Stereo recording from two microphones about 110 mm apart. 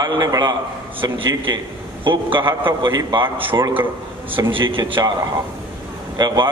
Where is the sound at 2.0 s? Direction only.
50° right (ahead or behind).